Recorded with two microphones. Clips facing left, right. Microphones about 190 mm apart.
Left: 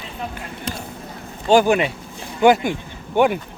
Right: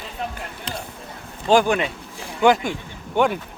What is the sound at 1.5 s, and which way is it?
Speech, 5° left (ahead or behind).